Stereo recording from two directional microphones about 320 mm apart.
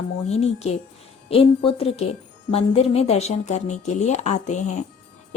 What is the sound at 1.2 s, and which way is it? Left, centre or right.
Speech, centre.